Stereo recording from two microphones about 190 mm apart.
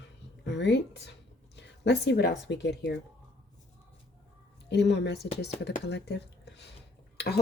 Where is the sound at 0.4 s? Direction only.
65° left (ahead or behind).